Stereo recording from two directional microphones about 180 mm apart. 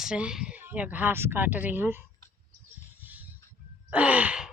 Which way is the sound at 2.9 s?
10° right (ahead or behind).